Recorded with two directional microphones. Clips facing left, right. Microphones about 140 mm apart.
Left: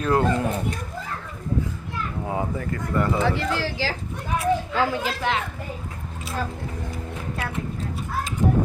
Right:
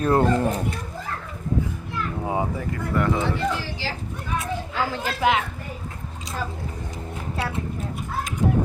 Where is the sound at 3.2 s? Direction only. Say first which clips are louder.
Left 1 dB; 90° left.